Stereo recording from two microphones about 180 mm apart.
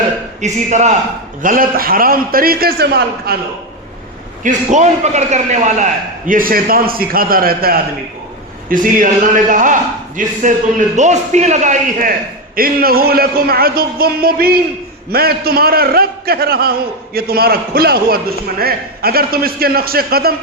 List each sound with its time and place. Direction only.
0.4 s a man's voice: 40° right (ahead or behind); by 3.3 s 60° right (ahead or behind)
4.4 s a man's voice: 40° right (ahead or behind); by 20.3 s 55° right (ahead or behind)